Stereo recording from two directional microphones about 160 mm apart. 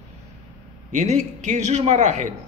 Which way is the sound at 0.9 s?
50° right (ahead or behind).